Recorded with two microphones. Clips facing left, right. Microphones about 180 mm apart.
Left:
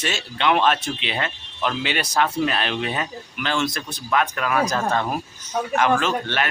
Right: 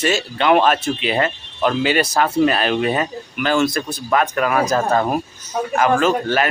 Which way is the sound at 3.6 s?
5° right (ahead or behind).